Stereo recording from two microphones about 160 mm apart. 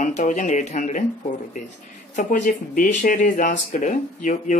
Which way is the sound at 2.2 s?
55° left (ahead or behind).